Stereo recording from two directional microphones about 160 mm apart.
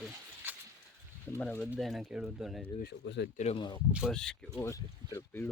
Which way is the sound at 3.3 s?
45° left (ahead or behind).